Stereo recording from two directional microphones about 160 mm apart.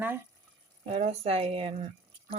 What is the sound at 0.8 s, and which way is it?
Speech, 40° right (ahead or behind).